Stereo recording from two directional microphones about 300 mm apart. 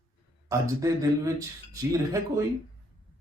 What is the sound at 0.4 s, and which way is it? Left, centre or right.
Speech, centre.